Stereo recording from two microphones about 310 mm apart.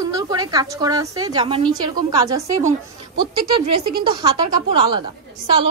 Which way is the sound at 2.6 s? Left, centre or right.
Right.